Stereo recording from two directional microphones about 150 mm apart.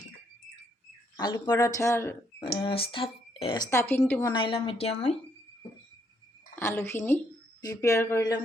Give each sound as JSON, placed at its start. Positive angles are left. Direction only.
{"t": 1.1, "sound": "speech", "side_deg": 30}
{"t": 2.4, "sound": "speech", "side_deg": 30}
{"t": 3.6, "sound": "a woman's voice", "side_deg": 20}
{"t": 4.3, "sound": "speech", "side_deg": 35}
{"t": 6.6, "sound": "a woman's voice", "side_deg": 15}